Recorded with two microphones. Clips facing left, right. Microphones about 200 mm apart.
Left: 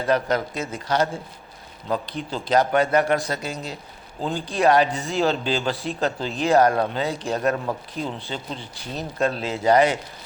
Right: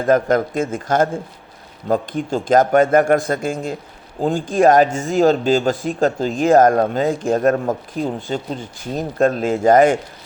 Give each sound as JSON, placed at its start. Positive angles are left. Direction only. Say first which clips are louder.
{"t": 0.0, "sound": "speech", "louder": "right 6 dB", "side_deg": -45}